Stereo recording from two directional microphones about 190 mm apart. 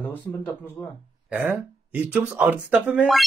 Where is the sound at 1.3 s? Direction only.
10° right (ahead or behind).